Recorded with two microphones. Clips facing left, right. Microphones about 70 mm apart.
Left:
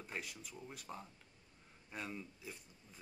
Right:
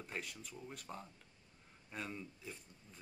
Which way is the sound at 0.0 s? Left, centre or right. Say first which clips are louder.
Even; centre.